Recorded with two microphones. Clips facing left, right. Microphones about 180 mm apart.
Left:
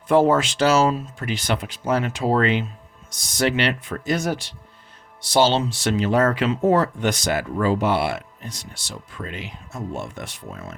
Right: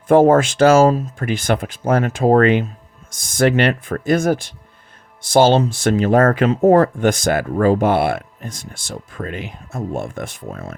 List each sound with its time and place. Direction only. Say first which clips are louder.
0.1 s speech: right 6 dB; 50° right (ahead or behind)